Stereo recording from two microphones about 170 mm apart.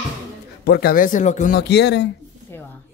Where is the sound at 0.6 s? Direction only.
70° left (ahead or behind); by 1.5 s 45° left (ahead or behind).